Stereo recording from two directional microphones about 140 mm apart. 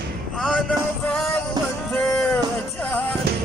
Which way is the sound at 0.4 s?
5° left (ahead or behind).